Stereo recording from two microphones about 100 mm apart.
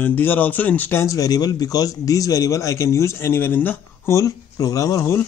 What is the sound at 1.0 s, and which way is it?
Speech, 35° left (ahead or behind).